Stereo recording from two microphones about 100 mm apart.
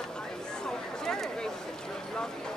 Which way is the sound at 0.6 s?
5° left (ahead or behind).